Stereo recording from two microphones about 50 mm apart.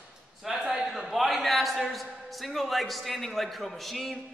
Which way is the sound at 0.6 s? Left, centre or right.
Centre.